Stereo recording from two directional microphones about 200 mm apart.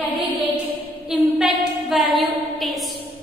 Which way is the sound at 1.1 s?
Centre (ahead or behind).